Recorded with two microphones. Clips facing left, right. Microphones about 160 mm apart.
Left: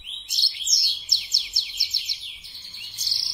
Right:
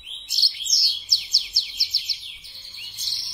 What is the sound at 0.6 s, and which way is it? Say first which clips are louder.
Bird: right 1 dB; 20° left (ahead or behind).